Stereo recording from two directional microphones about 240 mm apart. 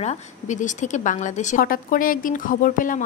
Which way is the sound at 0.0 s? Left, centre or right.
Left.